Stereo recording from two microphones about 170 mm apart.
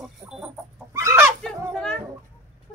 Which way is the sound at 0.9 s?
15° right (ahead or behind).